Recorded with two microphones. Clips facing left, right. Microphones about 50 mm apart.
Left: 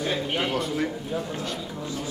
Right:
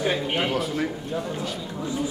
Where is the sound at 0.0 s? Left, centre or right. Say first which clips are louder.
Right 2 dB; centre.